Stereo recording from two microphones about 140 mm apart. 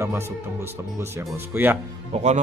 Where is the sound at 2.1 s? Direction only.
55° right (ahead or behind).